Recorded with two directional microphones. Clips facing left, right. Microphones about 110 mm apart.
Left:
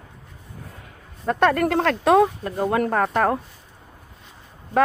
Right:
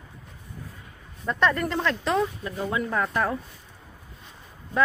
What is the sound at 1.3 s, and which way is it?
Speech, 50° left (ahead or behind).